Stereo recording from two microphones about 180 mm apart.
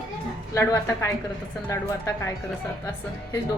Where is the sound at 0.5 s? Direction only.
15° left (ahead or behind).